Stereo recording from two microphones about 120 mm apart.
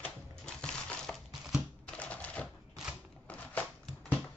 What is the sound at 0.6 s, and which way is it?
Crushing, 5° left (ahead or behind).